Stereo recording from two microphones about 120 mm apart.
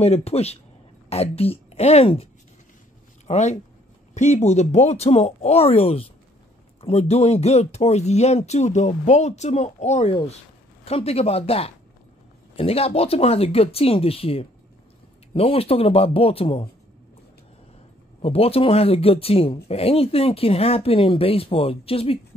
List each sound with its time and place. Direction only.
0.0 s speech: 60° left (ahead or behind)
3.3 s speech: 70° left (ahead or behind)
10.9 s speech: 55° left (ahead or behind)
18.2 s speech: 55° left (ahead or behind)